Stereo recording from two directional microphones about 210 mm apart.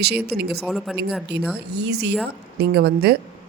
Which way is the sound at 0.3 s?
50° right (ahead or behind).